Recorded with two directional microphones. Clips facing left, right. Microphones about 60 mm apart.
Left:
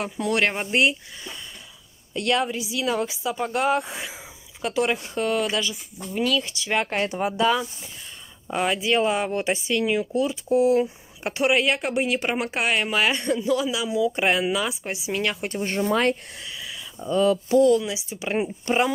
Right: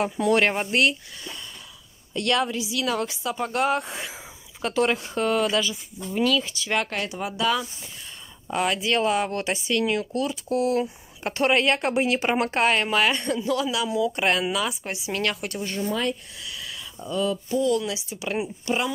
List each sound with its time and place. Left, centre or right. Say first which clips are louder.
0.0 s speech: right 3 dB; centre
0.7 s speech: left 1 dB; centre
2.1 s speech: even; centre
6.8 s speech: left 4 dB; left
8.5 s speech: left 1 dB; centre
15.6 s speech: left 5 dB; left
16.5 s a sound: even; centre
17.1 s speech: left 5 dB; left
17.7 s speech: left 1 dB; centre
18.4 s speech: left 5 dB; left